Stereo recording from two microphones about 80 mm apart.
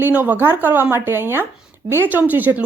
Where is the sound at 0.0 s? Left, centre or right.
Right.